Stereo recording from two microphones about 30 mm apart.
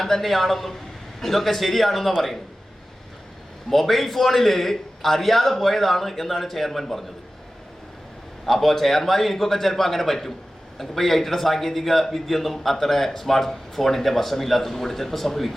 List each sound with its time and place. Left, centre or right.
0.0 s a man's voice: centre
3.7 s a man's voice: centre
8.4 s a man's voice: centre